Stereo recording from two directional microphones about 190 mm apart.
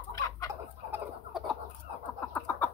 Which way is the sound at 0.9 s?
Centre (ahead or behind).